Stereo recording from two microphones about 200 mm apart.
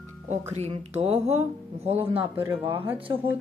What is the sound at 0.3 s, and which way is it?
Speech, 35° right (ahead or behind).